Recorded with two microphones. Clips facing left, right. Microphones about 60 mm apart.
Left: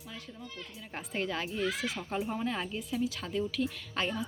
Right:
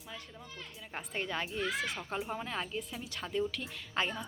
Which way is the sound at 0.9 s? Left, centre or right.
Centre.